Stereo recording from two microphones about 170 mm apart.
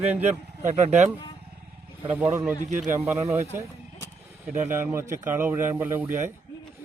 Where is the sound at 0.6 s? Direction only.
40° right (ahead or behind).